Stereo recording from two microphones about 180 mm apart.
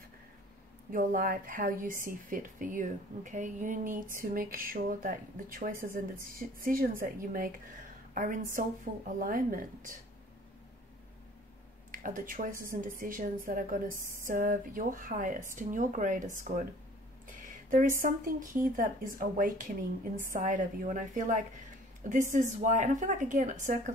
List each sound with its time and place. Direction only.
0.9 s a woman's voice: 50° right (ahead or behind)
11.9 s a woman's voice: 50° right (ahead or behind)